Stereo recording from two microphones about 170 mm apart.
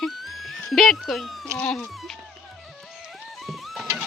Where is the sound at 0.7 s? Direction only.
Centre (ahead or behind).